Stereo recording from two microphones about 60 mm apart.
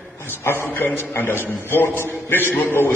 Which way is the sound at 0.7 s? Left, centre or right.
Left.